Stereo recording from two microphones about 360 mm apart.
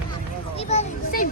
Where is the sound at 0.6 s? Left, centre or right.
Centre.